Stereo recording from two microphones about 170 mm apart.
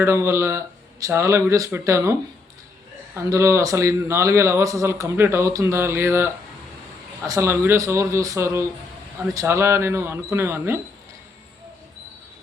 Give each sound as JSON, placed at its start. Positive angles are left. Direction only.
{"t": 0.0, "sound": "a man's voice", "side_deg": -15}
{"t": 3.2, "sound": "a man's voice", "side_deg": -15}